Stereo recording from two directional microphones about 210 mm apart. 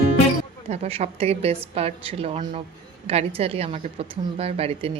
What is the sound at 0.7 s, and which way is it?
A woman's voice, 30° right (ahead or behind).